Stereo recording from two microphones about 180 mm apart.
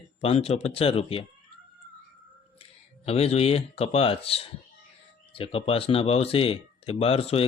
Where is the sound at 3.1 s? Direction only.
35° left (ahead or behind).